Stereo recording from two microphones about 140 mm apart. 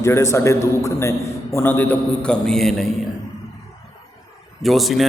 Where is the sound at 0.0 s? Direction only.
20° left (ahead or behind); by 2.8 s centre (ahead or behind).